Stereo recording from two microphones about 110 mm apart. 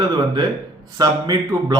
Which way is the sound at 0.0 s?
40° right (ahead or behind).